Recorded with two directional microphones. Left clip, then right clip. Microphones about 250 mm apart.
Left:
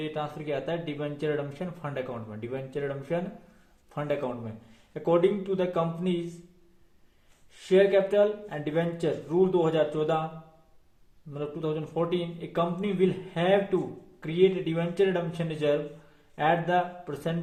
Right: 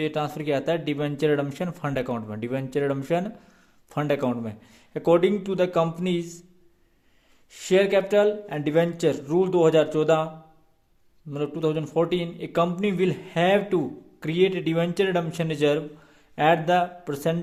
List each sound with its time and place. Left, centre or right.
0.0 s speech: right
7.7 s speech: right
11.3 s speech: right